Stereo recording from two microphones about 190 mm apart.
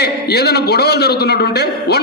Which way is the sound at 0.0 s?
60° left (ahead or behind).